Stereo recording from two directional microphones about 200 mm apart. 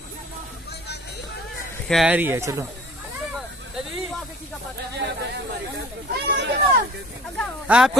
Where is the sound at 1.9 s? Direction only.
5° right (ahead or behind).